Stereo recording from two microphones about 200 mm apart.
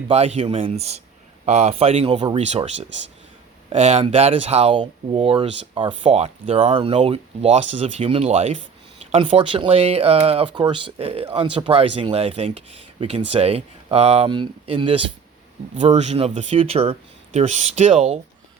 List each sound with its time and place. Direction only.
0.1 s speech: 30° right (ahead or behind)